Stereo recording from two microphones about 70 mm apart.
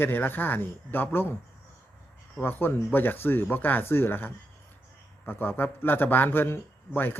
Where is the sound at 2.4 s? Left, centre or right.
Left.